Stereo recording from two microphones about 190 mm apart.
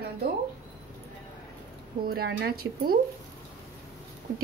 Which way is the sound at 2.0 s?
55° right (ahead or behind).